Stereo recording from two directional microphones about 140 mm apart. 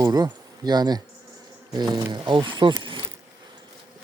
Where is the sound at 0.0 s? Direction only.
30° right (ahead or behind).